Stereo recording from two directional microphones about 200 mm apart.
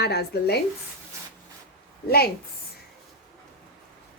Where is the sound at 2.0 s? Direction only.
50° left (ahead or behind).